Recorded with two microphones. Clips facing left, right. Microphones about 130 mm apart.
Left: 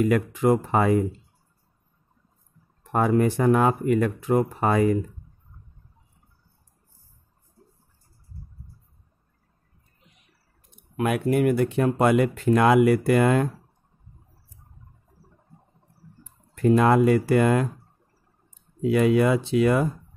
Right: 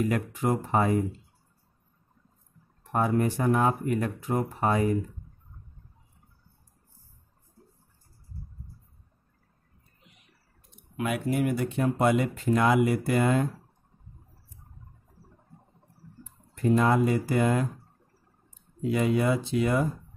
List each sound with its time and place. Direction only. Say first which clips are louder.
0.0 s speech: left 6 dB; 90° left
2.9 s speech: left 4 dB; 90° left
11.0 s speech: left 5 dB; 55° left (ahead or behind)
16.6 s speech: left 5 dB; 70° left (ahead or behind)
18.8 s speech: left 6 dB; 80° left